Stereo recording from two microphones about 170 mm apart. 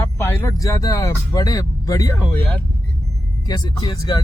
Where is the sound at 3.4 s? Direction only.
25° left (ahead or behind).